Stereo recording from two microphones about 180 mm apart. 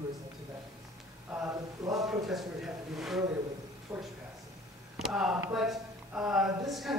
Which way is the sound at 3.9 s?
15° right (ahead or behind).